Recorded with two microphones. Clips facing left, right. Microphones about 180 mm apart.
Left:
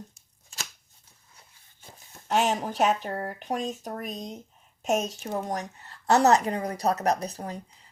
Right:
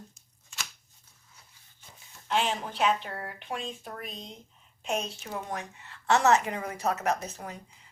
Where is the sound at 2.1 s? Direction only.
45° left (ahead or behind).